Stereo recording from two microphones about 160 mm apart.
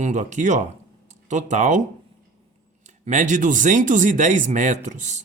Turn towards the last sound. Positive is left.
turn(degrees=-50)  # may be behind; listen again after turning